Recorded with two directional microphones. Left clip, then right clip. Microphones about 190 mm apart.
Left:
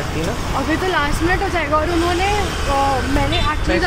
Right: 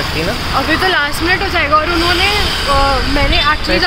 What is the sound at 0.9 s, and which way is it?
Speech, 15° left (ahead or behind).